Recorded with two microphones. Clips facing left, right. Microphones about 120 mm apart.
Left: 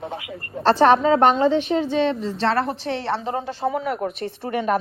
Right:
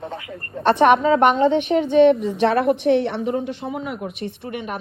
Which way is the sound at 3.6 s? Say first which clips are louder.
Left 5 dB; 90° left.